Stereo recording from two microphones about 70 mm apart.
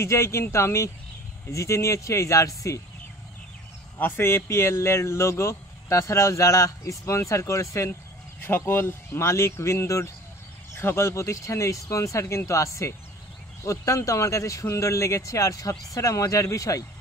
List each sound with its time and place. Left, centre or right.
0.0 s speech: left
4.0 s speech: left
8.5 s speech: left